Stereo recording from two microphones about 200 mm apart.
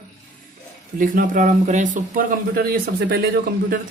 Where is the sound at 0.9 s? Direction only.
45° right (ahead or behind).